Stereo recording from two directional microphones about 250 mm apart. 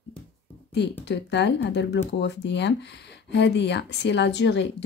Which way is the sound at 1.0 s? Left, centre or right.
Left.